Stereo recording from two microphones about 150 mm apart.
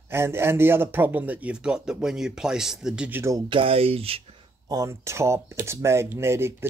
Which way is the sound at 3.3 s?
35° right (ahead or behind).